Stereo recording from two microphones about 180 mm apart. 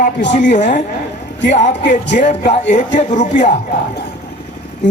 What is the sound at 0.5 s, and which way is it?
A man's voice, 45° left (ahead or behind).